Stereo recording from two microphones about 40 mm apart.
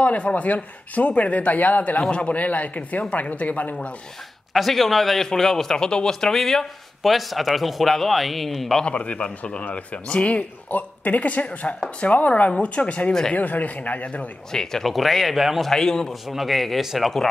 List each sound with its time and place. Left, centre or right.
0.0 s speech: left
4.6 s a man's voice: centre; by 6.0 s left
6.0 s speech: centre
8.8 s a man's voice: left
14.5 s a man's voice: centre
15.7 s a man's voice: centre
16.3 s speech: centre